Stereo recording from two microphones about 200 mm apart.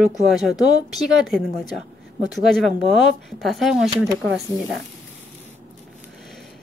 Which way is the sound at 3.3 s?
Centre (ahead or behind).